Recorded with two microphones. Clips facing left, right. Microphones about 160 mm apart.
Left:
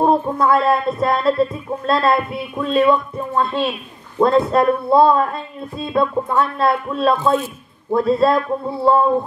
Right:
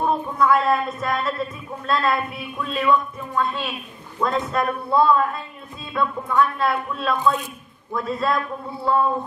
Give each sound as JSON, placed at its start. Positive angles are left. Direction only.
{"t": 0.0, "sound": "a man's voice", "side_deg": 30}